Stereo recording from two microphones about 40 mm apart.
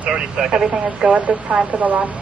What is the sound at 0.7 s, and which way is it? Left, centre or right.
A woman's voice, right.